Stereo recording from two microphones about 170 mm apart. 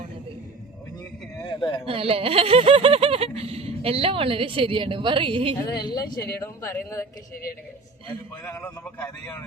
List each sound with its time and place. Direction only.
1.5 s a sound: 30° left (ahead or behind)
1.9 s snicker: 35° right (ahead or behind)
5.5 s a woman's voice: 25° left (ahead or behind)
8.4 s a woman's voice: 15° left (ahead or behind)